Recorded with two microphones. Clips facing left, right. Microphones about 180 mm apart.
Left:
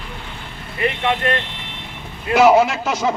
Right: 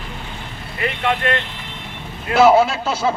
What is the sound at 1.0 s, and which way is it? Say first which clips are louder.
A man's voice: right 3 dB; 20° left (ahead or behind).